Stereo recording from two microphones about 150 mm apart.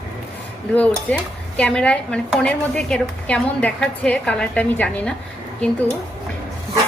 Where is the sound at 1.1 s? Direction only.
10° left (ahead or behind).